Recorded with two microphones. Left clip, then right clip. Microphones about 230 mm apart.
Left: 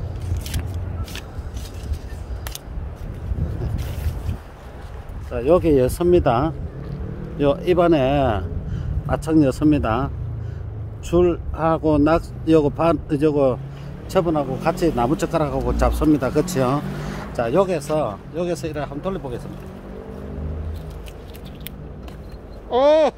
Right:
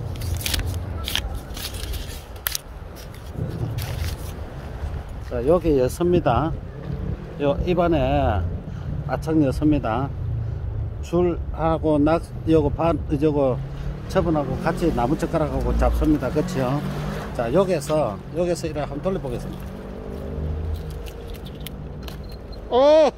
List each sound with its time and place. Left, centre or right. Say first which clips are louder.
5.3 s speech: left 3 dB; left
17.4 s speech: left 1 dB; left
22.7 s speech: even; centre